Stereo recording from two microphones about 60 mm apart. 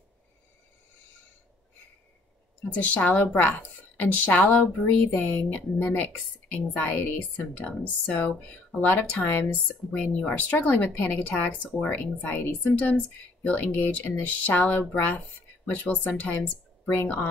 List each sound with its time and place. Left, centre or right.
2.7 s speech: left
9.8 s a woman's voice: left